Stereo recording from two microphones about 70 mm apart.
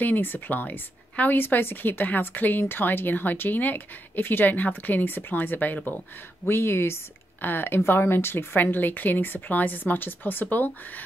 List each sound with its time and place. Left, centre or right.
0.0 s a woman's voice: left